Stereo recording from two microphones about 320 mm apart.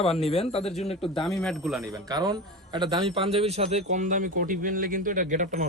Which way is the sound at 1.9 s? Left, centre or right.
Centre.